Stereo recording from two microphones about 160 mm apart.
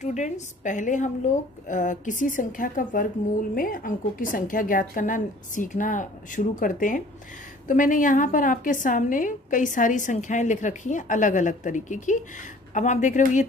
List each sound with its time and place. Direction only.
0.0 s a woman's voice: 45° left (ahead or behind)